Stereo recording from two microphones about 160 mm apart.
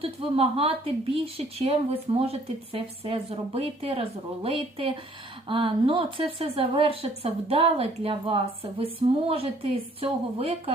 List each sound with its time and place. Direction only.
0.0 s a woman's voice: 35° right (ahead or behind)